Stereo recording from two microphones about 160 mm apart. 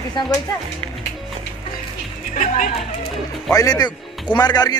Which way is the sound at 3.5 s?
20° left (ahead or behind).